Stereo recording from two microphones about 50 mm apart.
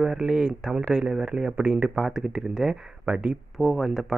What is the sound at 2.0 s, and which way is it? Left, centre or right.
Speech, centre.